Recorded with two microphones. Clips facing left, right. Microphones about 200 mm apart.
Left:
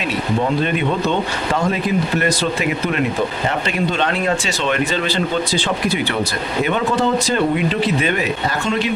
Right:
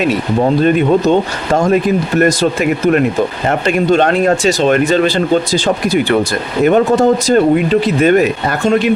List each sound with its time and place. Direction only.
0.6 s speech: 45° right (ahead or behind)